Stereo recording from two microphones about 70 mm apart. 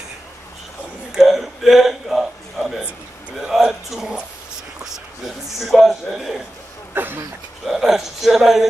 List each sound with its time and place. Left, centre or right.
1.1 s a sound: centre
3.3 s speech: centre
6.9 s speech: right
7.6 s speech: centre